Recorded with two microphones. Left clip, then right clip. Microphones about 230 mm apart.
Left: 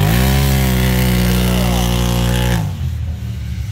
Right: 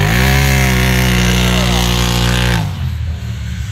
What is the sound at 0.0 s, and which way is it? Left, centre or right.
Chainsaw, centre.